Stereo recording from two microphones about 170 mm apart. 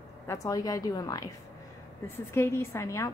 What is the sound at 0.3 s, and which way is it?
A woman's voice, 20° left (ahead or behind).